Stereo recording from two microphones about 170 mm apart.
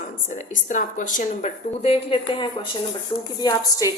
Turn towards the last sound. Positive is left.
turn(degrees=20)  # may be behind; listen again after turning